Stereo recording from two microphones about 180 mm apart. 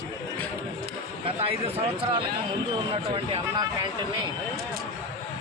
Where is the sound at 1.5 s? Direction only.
30° right (ahead or behind).